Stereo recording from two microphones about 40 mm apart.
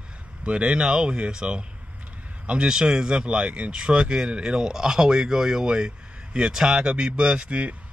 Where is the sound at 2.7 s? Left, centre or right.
Centre.